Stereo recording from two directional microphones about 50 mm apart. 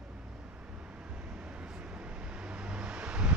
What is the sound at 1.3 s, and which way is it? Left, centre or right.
Vehicle, right.